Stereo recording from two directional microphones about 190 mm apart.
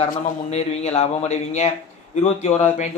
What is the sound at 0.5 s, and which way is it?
A man's voice, 35° left (ahead or behind).